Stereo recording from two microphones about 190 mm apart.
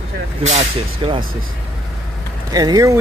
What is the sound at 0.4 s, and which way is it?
Speech, 35° right (ahead or behind).